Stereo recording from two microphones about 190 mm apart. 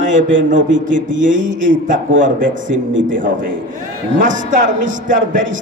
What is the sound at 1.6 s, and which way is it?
Speech, 45° right (ahead or behind).